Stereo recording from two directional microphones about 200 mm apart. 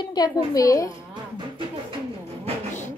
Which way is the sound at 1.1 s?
25° right (ahead or behind).